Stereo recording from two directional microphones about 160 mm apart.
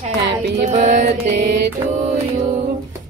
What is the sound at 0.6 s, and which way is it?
A woman's voice, 50° right (ahead or behind).